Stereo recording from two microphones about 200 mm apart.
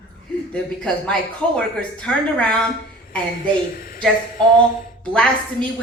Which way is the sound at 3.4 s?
45° left (ahead or behind).